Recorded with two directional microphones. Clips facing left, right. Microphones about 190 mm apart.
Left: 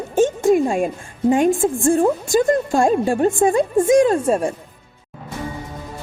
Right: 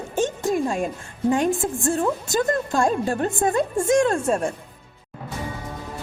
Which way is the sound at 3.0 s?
10° left (ahead or behind).